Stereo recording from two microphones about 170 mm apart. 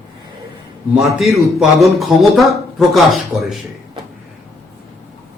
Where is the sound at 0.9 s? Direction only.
Centre (ahead or behind).